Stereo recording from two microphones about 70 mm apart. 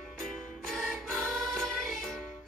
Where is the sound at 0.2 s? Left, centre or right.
Centre.